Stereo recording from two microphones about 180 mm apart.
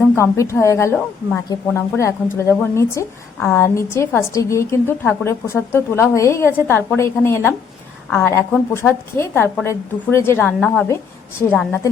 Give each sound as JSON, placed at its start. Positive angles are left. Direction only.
{"t": 0.2, "sound": "speech", "side_deg": 15}